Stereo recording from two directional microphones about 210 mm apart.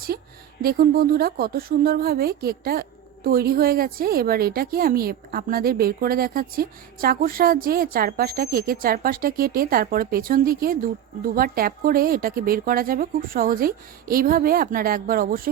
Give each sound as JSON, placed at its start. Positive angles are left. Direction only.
{"t": 0.6, "sound": "a woman's voice", "side_deg": -45}